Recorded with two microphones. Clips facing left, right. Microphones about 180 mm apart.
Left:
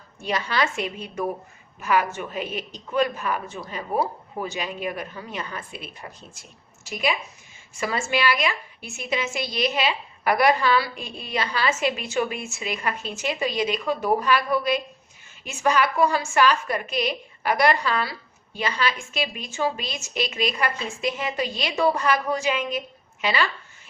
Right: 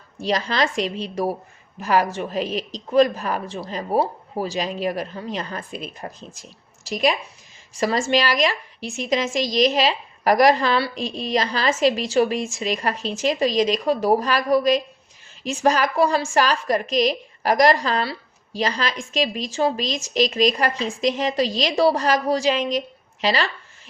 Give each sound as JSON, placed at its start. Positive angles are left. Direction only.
{"t": 0.2, "sound": "speech", "side_deg": -35}
{"t": 7.8, "sound": "speech", "side_deg": -35}
{"t": 10.9, "sound": "a woman's voice", "side_deg": -90}
{"t": 11.3, "sound": "speech", "side_deg": -35}
{"t": 23.2, "sound": "a sound", "side_deg": -35}